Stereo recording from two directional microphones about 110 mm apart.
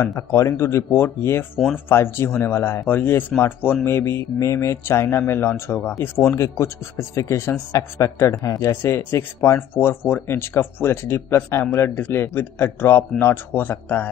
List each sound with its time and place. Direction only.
0.0 s speech: 25° left (ahead or behind)